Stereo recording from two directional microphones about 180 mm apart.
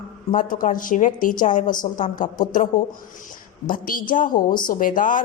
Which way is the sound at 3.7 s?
50° left (ahead or behind).